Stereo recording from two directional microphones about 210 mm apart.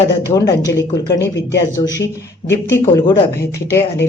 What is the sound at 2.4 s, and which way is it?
Speech, 10° left (ahead or behind).